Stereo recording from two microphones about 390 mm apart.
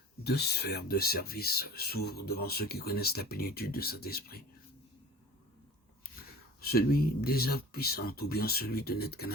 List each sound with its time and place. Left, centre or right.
0.3 s speech: left
6.6 s speech: left